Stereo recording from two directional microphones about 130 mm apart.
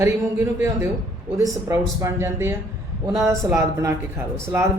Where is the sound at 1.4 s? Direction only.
25° right (ahead or behind).